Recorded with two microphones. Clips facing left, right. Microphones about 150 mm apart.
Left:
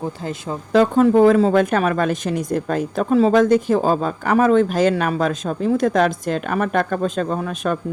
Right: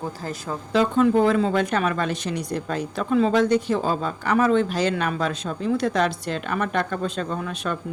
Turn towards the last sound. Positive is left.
turn(degrees=45)  # may be behind; listen again after turning